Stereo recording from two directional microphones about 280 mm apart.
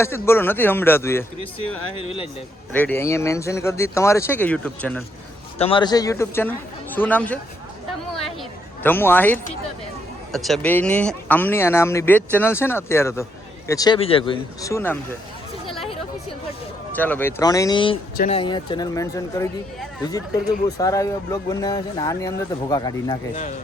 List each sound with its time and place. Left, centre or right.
0.0 s speech: centre
2.7 s speech: centre
5.5 s speech: centre
8.1 s a sound: centre
10.3 s speech: centre
16.9 s speech: centre